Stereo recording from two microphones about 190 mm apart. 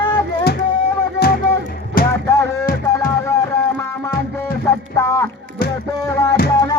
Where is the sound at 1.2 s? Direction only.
55° left (ahead or behind).